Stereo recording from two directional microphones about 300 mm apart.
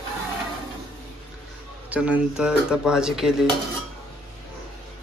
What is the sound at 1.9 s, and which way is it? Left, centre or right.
Speech, centre.